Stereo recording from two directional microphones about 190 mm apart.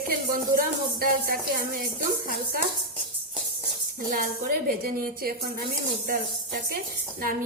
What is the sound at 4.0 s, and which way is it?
A woman's voice, 45° right (ahead or behind).